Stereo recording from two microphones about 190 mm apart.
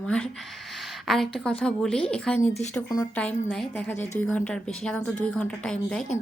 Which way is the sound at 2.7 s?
20° left (ahead or behind).